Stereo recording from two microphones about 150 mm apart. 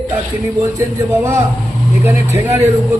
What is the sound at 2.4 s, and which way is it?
Speech, 15° right (ahead or behind).